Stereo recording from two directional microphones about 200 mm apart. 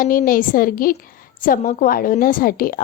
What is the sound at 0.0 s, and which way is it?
A woman's voice, 45° left (ahead or behind).